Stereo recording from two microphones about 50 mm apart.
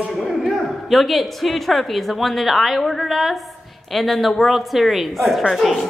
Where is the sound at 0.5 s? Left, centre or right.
Centre.